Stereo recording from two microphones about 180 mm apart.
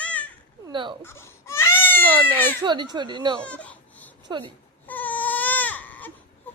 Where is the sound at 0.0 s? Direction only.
5° left (ahead or behind).